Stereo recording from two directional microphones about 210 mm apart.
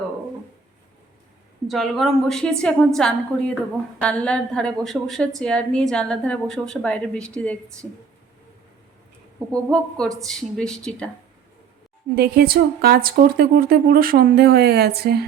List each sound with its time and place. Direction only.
1.6 s a woman's voice: centre (ahead or behind)
9.5 s a woman's voice: 5° left (ahead or behind)
12.1 s speech: 45° right (ahead or behind)